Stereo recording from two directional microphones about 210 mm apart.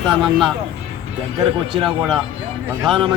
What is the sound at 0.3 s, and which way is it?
Speech, centre (ahead or behind).